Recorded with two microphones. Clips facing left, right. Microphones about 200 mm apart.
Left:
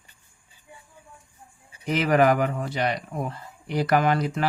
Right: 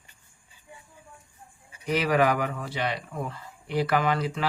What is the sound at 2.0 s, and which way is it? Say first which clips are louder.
Speech: left 4 dB; 50° left (ahead or behind).